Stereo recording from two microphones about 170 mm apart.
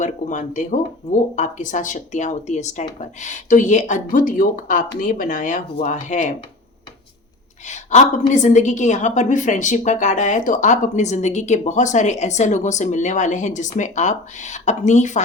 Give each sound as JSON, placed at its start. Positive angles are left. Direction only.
{"t": 0.0, "sound": "a woman's voice", "side_deg": 45}
{"t": 7.7, "sound": "a woman's voice", "side_deg": 45}